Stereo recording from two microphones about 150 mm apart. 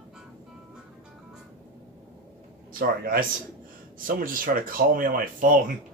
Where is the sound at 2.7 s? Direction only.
70° right (ahead or behind).